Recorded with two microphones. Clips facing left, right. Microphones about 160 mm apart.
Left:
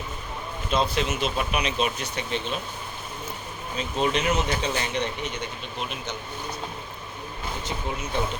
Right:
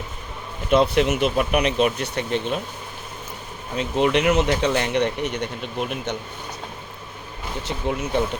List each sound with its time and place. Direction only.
0.7 s speech: 65° right (ahead or behind)
3.8 s speech: 70° right (ahead or behind)
5.8 s speech: 55° right (ahead or behind)
7.9 s speech: 65° right (ahead or behind)